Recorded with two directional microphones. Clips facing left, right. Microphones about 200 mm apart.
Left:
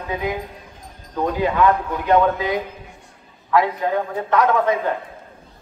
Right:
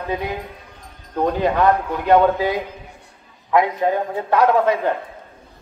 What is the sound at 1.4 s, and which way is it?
A man's voice, 35° right (ahead or behind).